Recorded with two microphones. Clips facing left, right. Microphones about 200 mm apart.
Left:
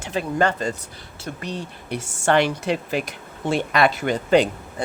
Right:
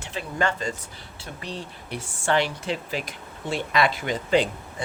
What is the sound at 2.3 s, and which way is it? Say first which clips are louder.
Speech: left 4 dB; 60° left (ahead or behind).